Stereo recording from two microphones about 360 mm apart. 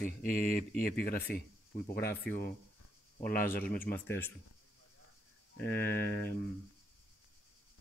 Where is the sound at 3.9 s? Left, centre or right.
Centre.